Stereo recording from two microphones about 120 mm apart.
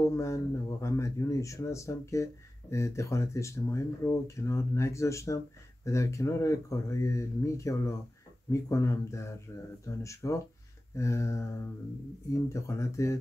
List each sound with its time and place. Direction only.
0.0 s speech: 25° left (ahead or behind)